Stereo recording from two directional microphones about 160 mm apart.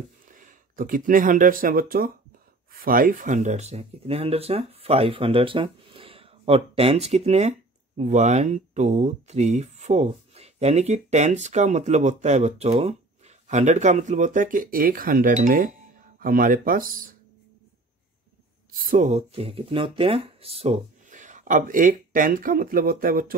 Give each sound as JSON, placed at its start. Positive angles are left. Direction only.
{"t": 0.3, "sound": "speech", "side_deg": -55}
{"t": 18.8, "sound": "speech", "side_deg": -55}
{"t": 21.1, "sound": "speech", "side_deg": -50}